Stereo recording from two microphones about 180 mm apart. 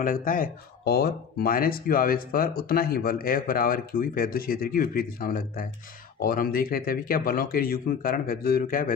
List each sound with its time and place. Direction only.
0.0 s speech: 50° left (ahead or behind)